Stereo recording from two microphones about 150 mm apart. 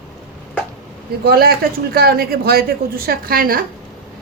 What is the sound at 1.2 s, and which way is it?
A man's voice, 90° right.